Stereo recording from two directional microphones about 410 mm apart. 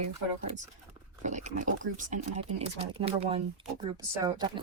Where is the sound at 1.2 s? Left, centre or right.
Centre.